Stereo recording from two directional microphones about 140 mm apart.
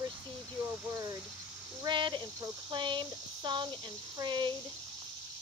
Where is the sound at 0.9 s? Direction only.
25° right (ahead or behind).